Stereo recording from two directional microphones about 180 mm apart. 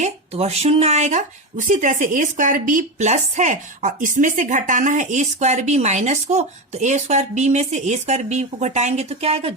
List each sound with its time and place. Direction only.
0.0 s speech: 35° right (ahead or behind)